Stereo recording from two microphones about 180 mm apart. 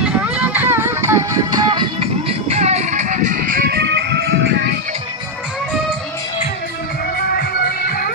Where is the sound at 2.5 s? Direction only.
35° right (ahead or behind); by 4.7 s 65° right (ahead or behind).